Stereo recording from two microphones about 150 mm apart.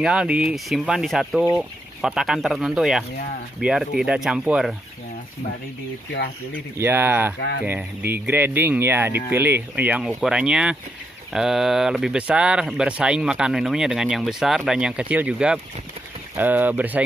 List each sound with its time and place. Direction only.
0.0 s speech: 5° right (ahead or behind)
6.8 s speech: 15° right (ahead or behind)